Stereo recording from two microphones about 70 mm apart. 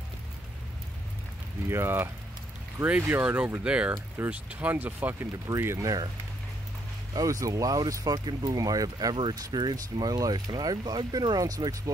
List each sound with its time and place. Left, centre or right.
1.7 s speech: right
3.6 s speech: centre
5.6 s speech: right
7.2 s speech: right